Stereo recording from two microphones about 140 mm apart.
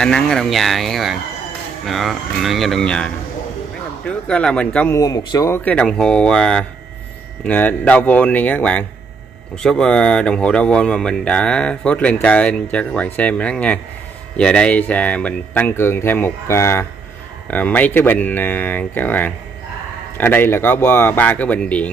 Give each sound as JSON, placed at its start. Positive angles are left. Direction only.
{"t": 0.0, "sound": "speech", "side_deg": 5}
{"t": 4.3, "sound": "speech", "side_deg": 5}
{"t": 4.9, "sound": "speech", "side_deg": 25}
{"t": 5.6, "sound": "speech", "side_deg": 10}